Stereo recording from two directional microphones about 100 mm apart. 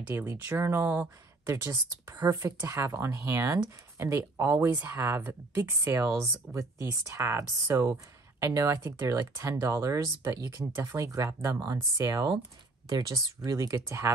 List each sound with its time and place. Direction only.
0.1 s speech: 20° right (ahead or behind)